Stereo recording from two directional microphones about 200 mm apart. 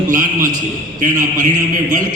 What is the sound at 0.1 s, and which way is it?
A man's voice, 40° right (ahead or behind).